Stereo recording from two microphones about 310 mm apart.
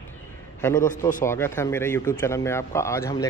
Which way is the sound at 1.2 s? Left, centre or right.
Centre.